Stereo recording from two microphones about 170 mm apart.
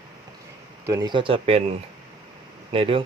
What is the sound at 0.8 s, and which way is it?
Speech, 20° right (ahead or behind).